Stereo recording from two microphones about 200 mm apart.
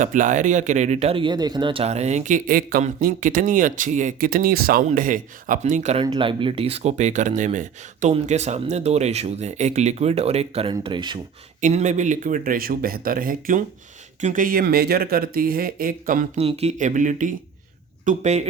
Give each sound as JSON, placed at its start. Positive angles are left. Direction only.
{"t": 0.0, "sound": "speech", "side_deg": -40}
{"t": 11.6, "sound": "speech", "side_deg": -35}